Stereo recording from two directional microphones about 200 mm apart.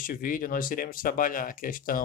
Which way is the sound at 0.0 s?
45° left (ahead or behind).